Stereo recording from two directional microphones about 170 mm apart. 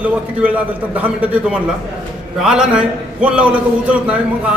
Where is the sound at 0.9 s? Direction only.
10° right (ahead or behind).